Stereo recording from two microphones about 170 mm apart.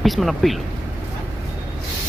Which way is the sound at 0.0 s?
Centre (ahead or behind).